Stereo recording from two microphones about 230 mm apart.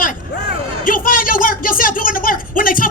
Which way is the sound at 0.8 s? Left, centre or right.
Left.